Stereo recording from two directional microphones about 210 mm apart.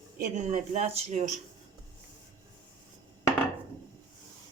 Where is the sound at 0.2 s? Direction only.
35° right (ahead or behind).